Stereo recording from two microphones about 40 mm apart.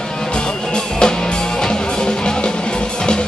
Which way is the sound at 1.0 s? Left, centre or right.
Centre.